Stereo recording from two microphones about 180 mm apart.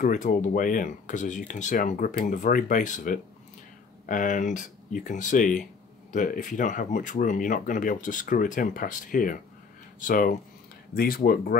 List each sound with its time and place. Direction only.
0.0 s speech: 45° left (ahead or behind)